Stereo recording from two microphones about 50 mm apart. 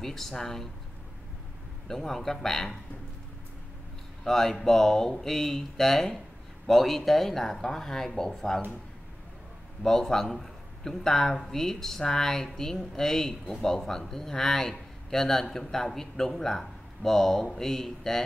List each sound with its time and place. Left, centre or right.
0.0 s speech: centre
1.9 s speech: centre
4.2 s speech: centre
9.8 s speech: centre